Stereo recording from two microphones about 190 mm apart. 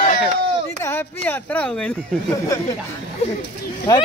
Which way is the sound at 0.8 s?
10° left (ahead or behind).